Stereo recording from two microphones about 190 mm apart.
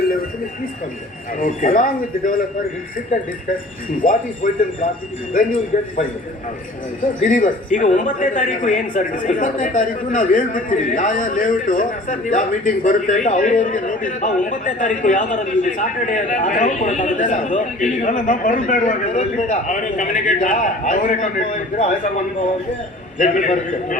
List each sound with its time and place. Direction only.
0.0 s a sound: 50° left (ahead or behind)
1.4 s speech: 45° left (ahead or behind)
4.0 s speech: 40° left (ahead or behind)
7.0 s speech: 40° left (ahead or behind)
23.1 s speech: 40° left (ahead or behind)